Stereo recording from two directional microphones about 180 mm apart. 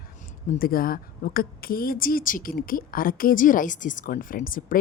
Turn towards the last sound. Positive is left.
turn(degrees=50)  # may be behind; listen again after turning